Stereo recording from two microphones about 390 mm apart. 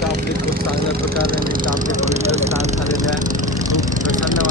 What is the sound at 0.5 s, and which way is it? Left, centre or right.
Vehicle, right.